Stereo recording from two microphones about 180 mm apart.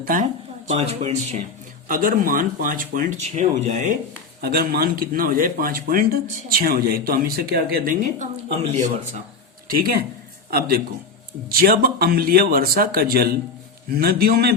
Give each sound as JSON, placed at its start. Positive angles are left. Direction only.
{"t": 0.0, "sound": "speech", "side_deg": -50}
{"t": 0.7, "sound": "a man's voice", "side_deg": -35}
{"t": 1.9, "sound": "speech", "side_deg": -50}
{"t": 4.4, "sound": "speech", "side_deg": -60}
{"t": 9.6, "sound": "speech", "side_deg": -55}
{"t": 11.4, "sound": "speech", "side_deg": -55}